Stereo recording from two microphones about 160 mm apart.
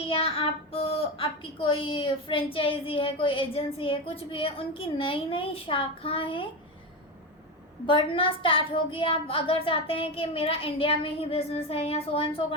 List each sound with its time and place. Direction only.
0.1 s speech: 35° left (ahead or behind)
7.9 s speech: 35° left (ahead or behind)